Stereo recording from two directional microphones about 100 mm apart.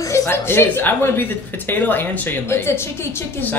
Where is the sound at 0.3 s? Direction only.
25° left (ahead or behind).